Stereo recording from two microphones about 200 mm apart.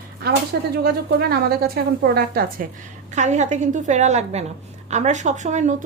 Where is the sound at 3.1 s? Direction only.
35° right (ahead or behind).